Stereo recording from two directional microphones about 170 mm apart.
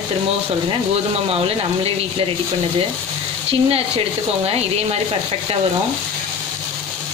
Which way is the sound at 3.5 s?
35° right (ahead or behind).